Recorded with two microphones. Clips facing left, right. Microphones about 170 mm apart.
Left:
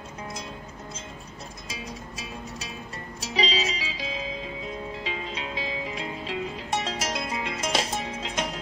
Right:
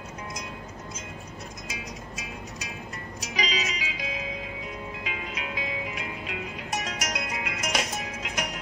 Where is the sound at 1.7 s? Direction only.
30° left (ahead or behind).